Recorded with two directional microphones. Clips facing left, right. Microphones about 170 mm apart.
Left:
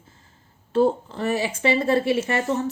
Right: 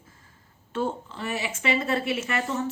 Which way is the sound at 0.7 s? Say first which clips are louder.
Left 9 dB; 40° left (ahead or behind).